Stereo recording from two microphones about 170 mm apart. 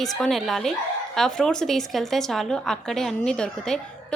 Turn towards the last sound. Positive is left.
turn(degrees=5)  # may be behind; listen again after turning